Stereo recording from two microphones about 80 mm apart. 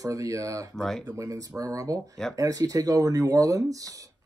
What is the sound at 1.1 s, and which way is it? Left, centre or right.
Speech, right.